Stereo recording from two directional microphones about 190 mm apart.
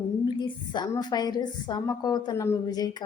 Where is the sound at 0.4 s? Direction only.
25° left (ahead or behind).